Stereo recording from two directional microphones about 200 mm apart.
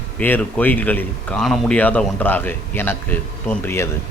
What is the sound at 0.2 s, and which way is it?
A man's voice, 10° left (ahead or behind).